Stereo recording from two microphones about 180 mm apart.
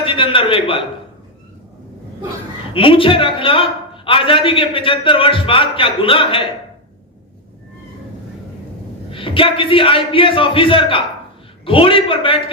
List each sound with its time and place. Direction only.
0.0 s a man's voice: 30° left (ahead or behind)
2.7 s a man's voice: 30° left (ahead or behind)
9.1 s a man's voice: 30° left (ahead or behind)